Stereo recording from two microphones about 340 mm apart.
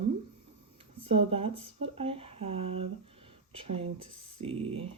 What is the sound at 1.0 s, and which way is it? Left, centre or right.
Speech, centre.